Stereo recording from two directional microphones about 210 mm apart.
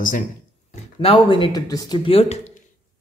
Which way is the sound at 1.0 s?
25° left (ahead or behind).